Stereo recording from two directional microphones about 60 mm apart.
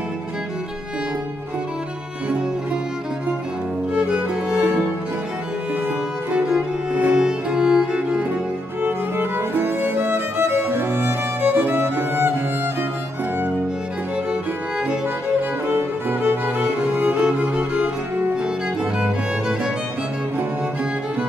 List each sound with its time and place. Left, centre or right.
3.9 s music: centre
6.3 s music: centre
8.8 s music: right
11.7 s music: right
15.6 s music: right; by 18.5 s centre